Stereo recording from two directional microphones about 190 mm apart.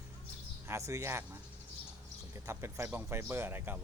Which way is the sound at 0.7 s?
15° right (ahead or behind).